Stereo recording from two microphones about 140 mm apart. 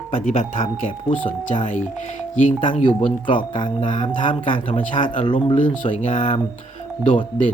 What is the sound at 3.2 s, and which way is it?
Speech, 35° left (ahead or behind).